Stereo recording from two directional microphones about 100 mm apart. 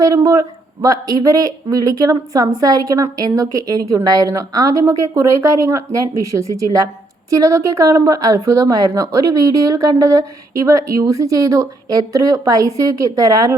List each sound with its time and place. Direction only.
0.0 s speech: 35° right (ahead or behind)